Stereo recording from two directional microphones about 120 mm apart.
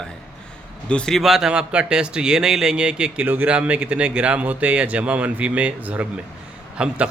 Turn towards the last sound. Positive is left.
turn(degrees=-10)  # may be behind; listen again after turning